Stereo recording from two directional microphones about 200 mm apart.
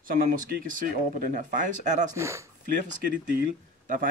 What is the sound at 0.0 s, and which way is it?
Speech, 45° right (ahead or behind).